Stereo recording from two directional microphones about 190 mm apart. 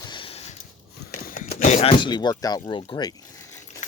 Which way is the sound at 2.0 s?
20° left (ahead or behind).